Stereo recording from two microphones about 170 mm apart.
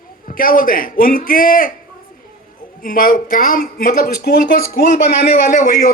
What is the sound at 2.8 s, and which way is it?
A man's voice, 55° left (ahead or behind).